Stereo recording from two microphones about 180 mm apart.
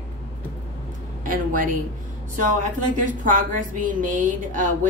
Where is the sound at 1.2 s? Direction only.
50° right (ahead or behind).